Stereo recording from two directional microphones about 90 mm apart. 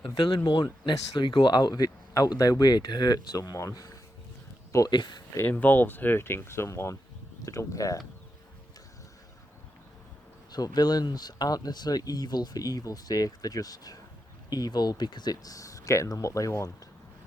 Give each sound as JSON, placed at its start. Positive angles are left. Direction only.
{"t": 0.0, "sound": "speech", "side_deg": 55}
{"t": 4.9, "sound": "speech", "side_deg": 55}
{"t": 5.4, "sound": "speech", "side_deg": 20}
{"t": 10.5, "sound": "speech", "side_deg": 45}